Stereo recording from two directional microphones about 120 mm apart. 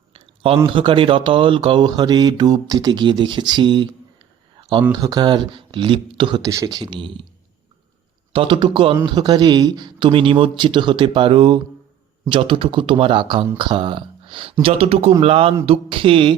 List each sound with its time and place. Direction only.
0.1 s a sound: 55° right (ahead or behind)
0.7 s speech: 45° right (ahead or behind)
4.9 s speech: 30° right (ahead or behind)
6.4 s speech: 30° right (ahead or behind); by 7.2 s 45° right (ahead or behind)
8.3 s speech: 45° right (ahead or behind)